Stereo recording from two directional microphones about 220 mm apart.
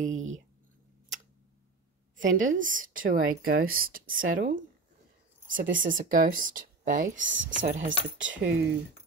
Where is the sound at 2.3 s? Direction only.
35° right (ahead or behind).